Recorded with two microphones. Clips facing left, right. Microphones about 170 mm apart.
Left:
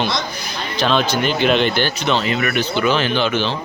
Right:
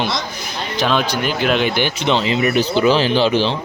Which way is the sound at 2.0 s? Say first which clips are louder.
Right 5 dB; 25° right (ahead or behind).